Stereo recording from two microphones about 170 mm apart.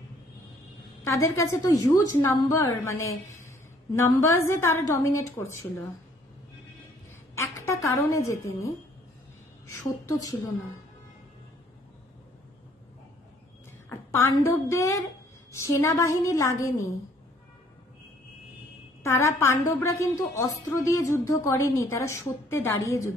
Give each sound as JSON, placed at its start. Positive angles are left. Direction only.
{"t": 1.0, "sound": "speech", "side_deg": 15}
{"t": 4.1, "sound": "speech", "side_deg": 20}
{"t": 7.3, "sound": "a woman's voice", "side_deg": 15}
{"t": 13.8, "sound": "speech", "side_deg": 15}
{"t": 19.0, "sound": "speech", "side_deg": 15}